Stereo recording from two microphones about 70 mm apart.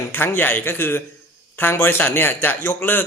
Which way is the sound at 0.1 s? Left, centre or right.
Left.